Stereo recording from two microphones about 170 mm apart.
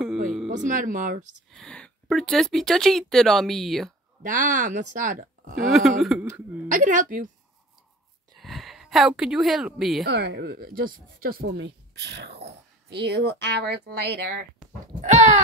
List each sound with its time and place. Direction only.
0.7 s speech: 50° right (ahead or behind)
1.5 s speech: 5° left (ahead or behind)
4.2 s speech: 50° right (ahead or behind)
5.7 s speech: centre (ahead or behind)
6.7 s speech: 50° right (ahead or behind)
8.4 s speech: centre (ahead or behind)
10.0 s speech: 70° right (ahead or behind)
15.0 s speech: 45° right (ahead or behind)